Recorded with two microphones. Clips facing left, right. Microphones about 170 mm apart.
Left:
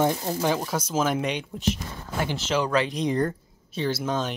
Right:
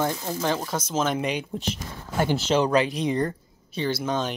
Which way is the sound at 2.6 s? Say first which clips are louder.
Right 1 dB; 15° right (ahead or behind).